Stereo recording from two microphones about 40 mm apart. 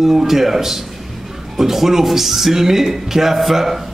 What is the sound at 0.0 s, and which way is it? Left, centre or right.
A man's voice, centre.